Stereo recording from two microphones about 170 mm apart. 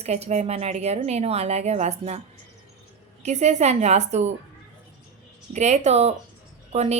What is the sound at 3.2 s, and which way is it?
A woman's voice, 40° right (ahead or behind).